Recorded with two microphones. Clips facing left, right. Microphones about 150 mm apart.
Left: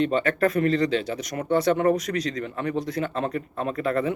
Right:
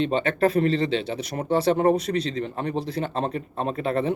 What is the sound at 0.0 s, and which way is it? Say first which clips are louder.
Speech: even; 25° right (ahead or behind).